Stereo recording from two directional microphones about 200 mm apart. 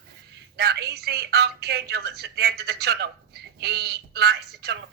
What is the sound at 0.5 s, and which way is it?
A woman's voice, 55° right (ahead or behind).